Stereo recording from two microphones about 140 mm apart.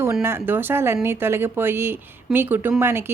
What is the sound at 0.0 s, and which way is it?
A woman's voice, 20° right (ahead or behind).